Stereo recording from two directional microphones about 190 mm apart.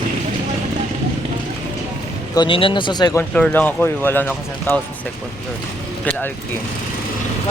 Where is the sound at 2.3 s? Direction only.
25° left (ahead or behind).